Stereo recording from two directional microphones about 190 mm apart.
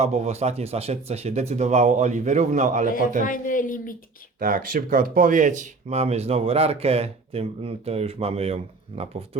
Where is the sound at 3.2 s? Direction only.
45° left (ahead or behind).